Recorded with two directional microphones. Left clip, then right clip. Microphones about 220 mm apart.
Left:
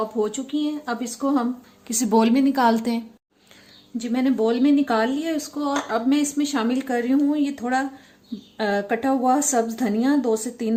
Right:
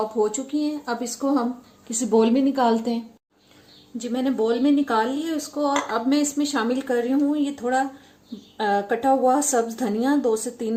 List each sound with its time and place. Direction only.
0.3 s a woman's voice: 30° left (ahead or behind)
1.9 s a woman's voice: 50° left (ahead or behind)